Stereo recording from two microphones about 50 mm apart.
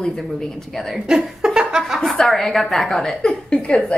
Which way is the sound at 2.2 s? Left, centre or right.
Centre.